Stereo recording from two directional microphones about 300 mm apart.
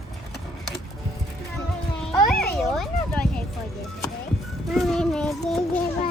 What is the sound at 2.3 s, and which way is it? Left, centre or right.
Speech, left.